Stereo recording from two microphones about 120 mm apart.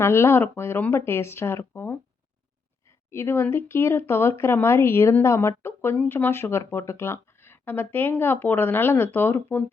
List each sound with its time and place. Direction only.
0.0 s speech: 20° left (ahead or behind)
3.1 s speech: 20° left (ahead or behind)